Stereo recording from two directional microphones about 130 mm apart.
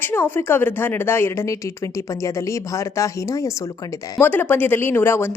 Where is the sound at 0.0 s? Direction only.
15° left (ahead or behind).